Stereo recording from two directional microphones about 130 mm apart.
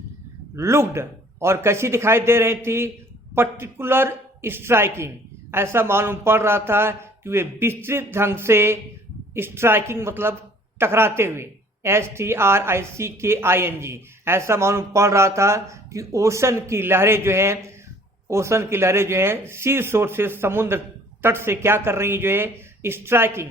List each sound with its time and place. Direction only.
0.5 s a woman's voice: 20° right (ahead or behind)